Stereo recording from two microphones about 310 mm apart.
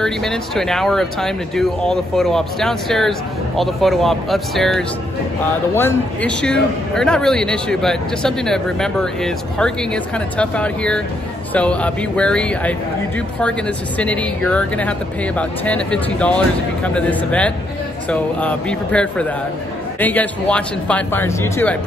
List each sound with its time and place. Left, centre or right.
0.0 s a man's voice: centre